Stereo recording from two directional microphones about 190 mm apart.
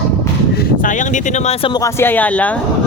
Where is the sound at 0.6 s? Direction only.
45° left (ahead or behind).